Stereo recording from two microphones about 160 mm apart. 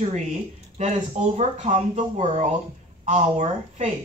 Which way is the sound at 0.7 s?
45° right (ahead or behind).